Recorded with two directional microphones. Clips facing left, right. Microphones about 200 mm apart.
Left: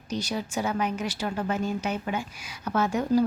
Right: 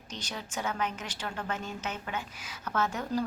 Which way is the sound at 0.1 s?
10° left (ahead or behind).